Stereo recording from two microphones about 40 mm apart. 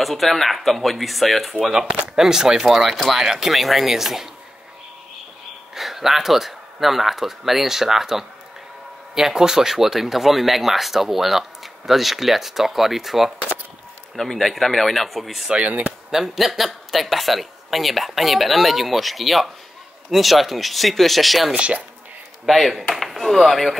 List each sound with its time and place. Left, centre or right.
0.0 s speech: centre
1.6 s speech: centre
5.8 s speech: centre
14.1 s speech: centre
15.5 s speech: right
16.1 s speech: centre
21.5 s speech: right
22.5 s speech: centre